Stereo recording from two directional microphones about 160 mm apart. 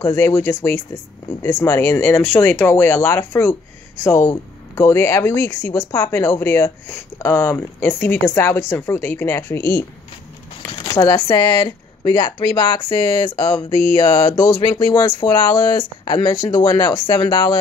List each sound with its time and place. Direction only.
0.0 s speech: 20° left (ahead or behind)
11.0 s speech: 20° left (ahead or behind)
13.7 s a sound: 35° right (ahead or behind)
14.0 s speech: 25° left (ahead or behind)